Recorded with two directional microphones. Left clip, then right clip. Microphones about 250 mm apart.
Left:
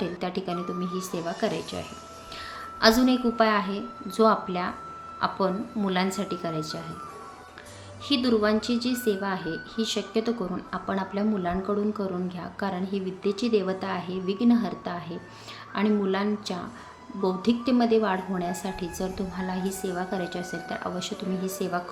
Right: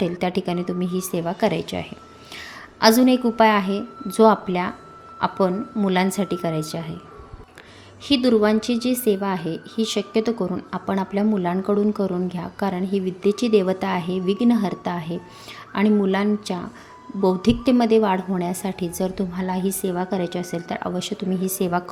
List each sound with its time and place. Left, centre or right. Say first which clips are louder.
0.0 s speech: right 7 dB; right
2.8 s speech: right 5 dB; right
8.0 s speech: right 6 dB; right